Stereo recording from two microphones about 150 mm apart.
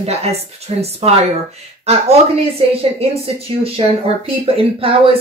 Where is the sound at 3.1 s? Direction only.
40° right (ahead or behind).